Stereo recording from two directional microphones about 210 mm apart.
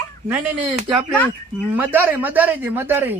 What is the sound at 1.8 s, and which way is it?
A man's voice, 10° right (ahead or behind).